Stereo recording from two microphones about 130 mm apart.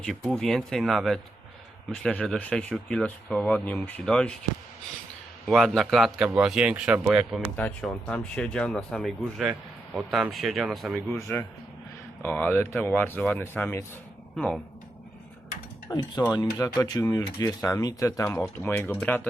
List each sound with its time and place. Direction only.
0.0 s a man's voice: 5° left (ahead or behind)
5.5 s a man's voice: centre (ahead or behind)
7.5 s a man's voice: 10° left (ahead or behind)
12.2 s speech: 15° left (ahead or behind)
14.3 s a man's voice: 5° left (ahead or behind)
15.9 s speech: 30° left (ahead or behind); by 19.3 s 15° left (ahead or behind)